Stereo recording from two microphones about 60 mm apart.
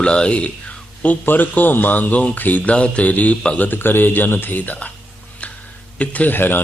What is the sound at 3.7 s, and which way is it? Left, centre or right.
Speech, left.